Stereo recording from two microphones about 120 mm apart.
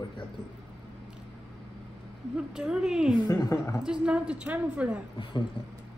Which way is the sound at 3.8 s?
5° right (ahead or behind).